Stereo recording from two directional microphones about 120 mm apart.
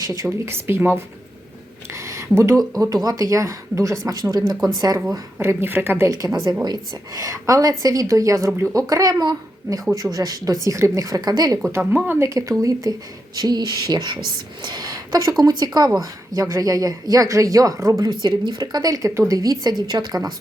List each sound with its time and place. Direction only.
0.0 s speech: 30° right (ahead or behind)
1.9 s a sound: 25° right (ahead or behind)
2.7 s speech: 30° right (ahead or behind)
5.1 s speech: 20° right (ahead or behind)
11.7 s speech: 15° right (ahead or behind); by 20.3 s 35° right (ahead or behind)